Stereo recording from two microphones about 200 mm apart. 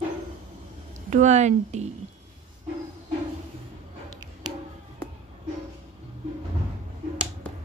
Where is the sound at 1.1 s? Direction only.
35° right (ahead or behind).